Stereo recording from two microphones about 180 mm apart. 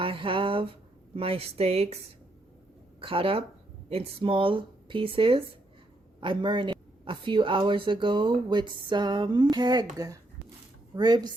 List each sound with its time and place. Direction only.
0.0 s a sound: 30° right (ahead or behind)
1.1 s speech: 30° right (ahead or behind)
3.0 s a woman's voice: 30° right (ahead or behind)